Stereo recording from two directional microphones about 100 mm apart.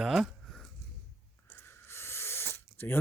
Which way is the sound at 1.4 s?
20° left (ahead or behind).